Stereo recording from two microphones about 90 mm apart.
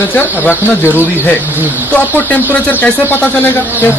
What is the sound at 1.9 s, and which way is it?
Speech, 20° left (ahead or behind).